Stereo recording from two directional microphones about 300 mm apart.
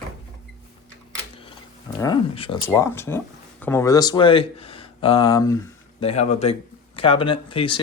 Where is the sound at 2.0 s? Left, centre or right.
Centre.